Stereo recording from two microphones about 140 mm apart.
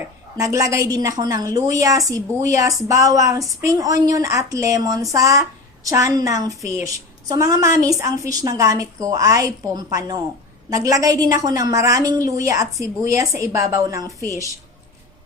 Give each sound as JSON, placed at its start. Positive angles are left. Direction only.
{"t": 0.3, "sound": "a woman's voice", "side_deg": -25}